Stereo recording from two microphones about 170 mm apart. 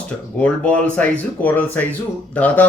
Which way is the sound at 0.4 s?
10° left (ahead or behind).